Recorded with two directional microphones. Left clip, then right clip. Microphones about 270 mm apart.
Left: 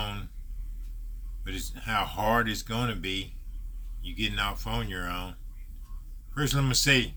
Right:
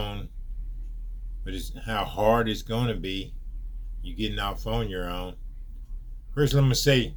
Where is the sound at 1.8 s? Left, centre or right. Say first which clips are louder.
Left 1 dB; left.